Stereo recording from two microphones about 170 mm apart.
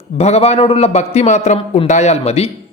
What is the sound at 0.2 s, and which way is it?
Speech, 40° left (ahead or behind).